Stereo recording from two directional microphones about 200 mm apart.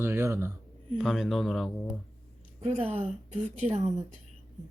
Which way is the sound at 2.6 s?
30° right (ahead or behind).